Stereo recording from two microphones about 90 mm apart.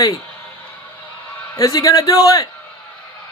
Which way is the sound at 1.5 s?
40° left (ahead or behind).